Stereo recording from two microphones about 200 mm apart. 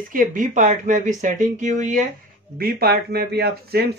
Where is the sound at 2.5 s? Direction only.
50° right (ahead or behind).